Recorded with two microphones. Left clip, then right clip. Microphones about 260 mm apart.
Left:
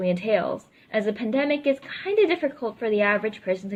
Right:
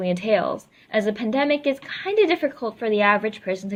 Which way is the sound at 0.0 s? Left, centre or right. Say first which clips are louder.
Right 2 dB; centre.